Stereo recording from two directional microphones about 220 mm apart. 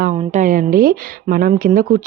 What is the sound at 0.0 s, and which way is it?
A woman's voice, 35° right (ahead or behind).